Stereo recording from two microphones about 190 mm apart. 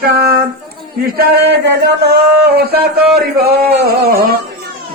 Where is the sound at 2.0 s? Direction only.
55° right (ahead or behind).